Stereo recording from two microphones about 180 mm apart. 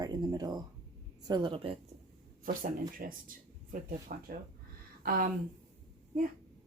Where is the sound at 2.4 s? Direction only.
50° right (ahead or behind).